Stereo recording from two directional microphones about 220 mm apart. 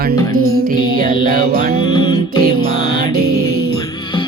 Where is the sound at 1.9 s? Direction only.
20° left (ahead or behind).